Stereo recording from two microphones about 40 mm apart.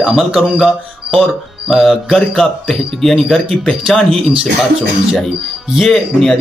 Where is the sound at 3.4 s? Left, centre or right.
Centre.